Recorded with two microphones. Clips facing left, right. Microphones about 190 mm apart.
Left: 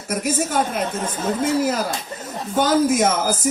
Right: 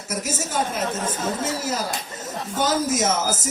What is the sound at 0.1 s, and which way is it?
Speech, 55° left (ahead or behind).